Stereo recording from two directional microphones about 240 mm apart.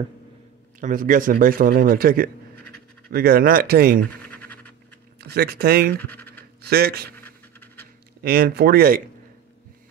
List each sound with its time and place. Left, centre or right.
0.7 s a man's voice: right
4.4 s scratch: centre
5.3 s a man's voice: right
5.9 s speech: left
6.6 s a man's voice: right
8.2 s a man's voice: right